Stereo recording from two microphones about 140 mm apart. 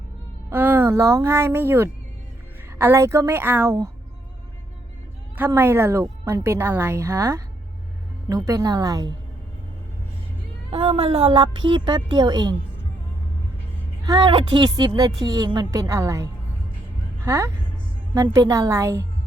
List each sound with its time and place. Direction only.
0.5 s a woman's voice: 15° right (ahead or behind)
5.5 s a woman's voice: 15° right (ahead or behind)
10.7 s a woman's voice: 40° right (ahead or behind)
14.0 s a woman's voice: 30° right (ahead or behind)